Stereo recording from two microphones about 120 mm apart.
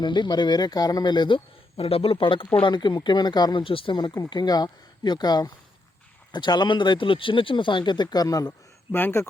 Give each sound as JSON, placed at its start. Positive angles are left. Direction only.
{"t": 0.0, "sound": "speech", "side_deg": 40}
{"t": 1.7, "sound": "speech", "side_deg": 55}
{"t": 8.9, "sound": "speech", "side_deg": 15}